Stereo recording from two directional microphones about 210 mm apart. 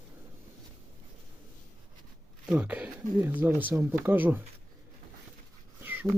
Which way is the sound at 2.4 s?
5° right (ahead or behind).